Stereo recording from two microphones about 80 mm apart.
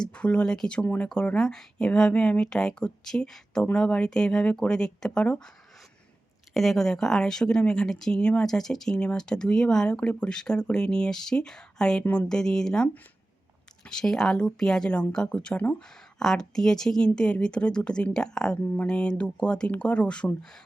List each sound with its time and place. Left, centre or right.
0.0 s speech: centre
6.5 s speech: centre